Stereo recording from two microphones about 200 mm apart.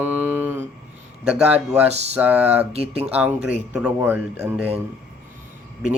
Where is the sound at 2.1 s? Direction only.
10° right (ahead or behind).